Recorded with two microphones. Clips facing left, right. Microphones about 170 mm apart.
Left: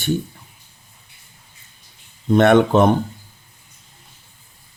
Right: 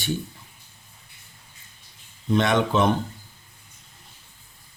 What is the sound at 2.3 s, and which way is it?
Speech, 55° left (ahead or behind).